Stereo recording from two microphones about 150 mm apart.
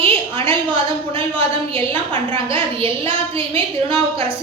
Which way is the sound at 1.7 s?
40° right (ahead or behind).